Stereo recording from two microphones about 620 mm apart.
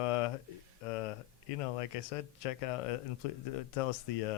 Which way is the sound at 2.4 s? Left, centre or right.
Left.